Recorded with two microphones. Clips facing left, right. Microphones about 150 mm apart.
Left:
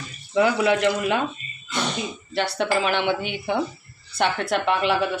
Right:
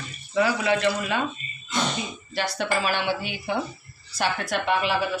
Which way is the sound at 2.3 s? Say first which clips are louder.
Left 3 dB; 65° left (ahead or behind).